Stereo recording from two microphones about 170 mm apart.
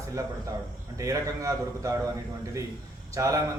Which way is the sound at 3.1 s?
20° right (ahead or behind).